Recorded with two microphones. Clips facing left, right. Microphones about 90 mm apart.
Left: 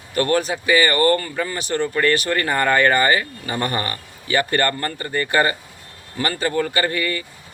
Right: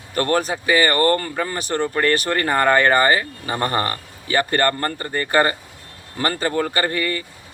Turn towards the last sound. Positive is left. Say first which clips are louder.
# even
turn(degrees=-35)  # may be behind; listen again after turning